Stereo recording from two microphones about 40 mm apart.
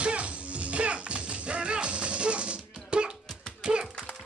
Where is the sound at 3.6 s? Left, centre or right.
Centre.